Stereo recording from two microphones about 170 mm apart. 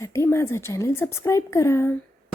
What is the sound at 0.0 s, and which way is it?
Speech, 15° left (ahead or behind).